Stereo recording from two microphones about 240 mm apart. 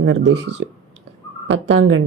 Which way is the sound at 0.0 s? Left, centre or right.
Right.